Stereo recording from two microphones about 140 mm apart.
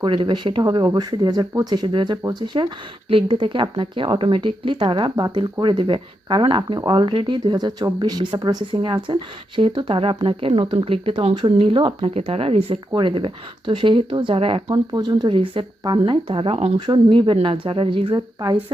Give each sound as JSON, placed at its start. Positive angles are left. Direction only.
{"t": 0.0, "sound": "speech", "side_deg": -35}
{"t": 12.1, "sound": "speech", "side_deg": -45}
{"t": 16.8, "sound": "speech", "side_deg": -35}